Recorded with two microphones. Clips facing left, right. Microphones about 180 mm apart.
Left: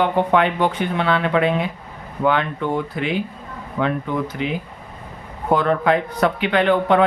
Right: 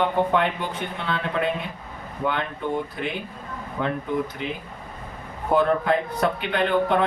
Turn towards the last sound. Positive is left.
turn(degrees=90)